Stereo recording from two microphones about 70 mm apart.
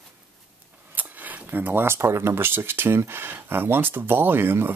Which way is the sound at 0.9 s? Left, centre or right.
Right.